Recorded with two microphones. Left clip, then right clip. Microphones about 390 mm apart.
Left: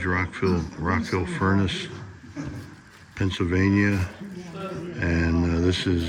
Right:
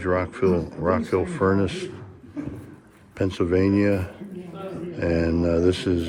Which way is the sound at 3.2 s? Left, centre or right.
Centre.